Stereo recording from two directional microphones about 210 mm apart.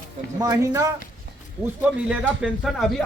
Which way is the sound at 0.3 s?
15° right (ahead or behind).